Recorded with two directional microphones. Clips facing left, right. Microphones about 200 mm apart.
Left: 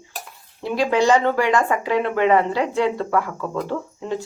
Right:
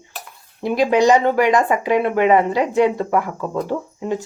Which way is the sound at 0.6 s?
15° right (ahead or behind).